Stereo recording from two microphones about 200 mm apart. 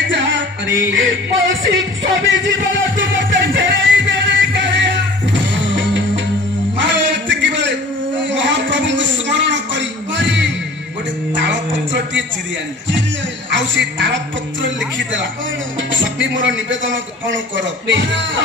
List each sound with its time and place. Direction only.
0.1 s music: 65° right (ahead or behind)
8.3 s a sound: 65° right (ahead or behind)
13.5 s speech: 65° right (ahead or behind)
15.9 s a man's voice: 70° right (ahead or behind)